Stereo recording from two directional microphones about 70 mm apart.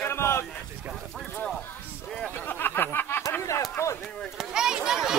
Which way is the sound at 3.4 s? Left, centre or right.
Left.